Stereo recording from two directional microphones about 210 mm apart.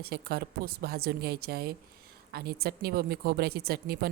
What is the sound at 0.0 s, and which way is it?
A woman's voice, 45° right (ahead or behind).